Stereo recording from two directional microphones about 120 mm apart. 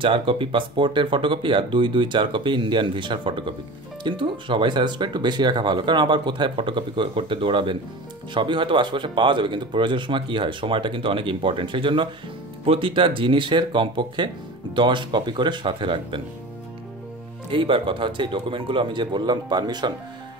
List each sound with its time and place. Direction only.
0.0 s speech: 45° right (ahead or behind)
17.5 s speech: 45° right (ahead or behind)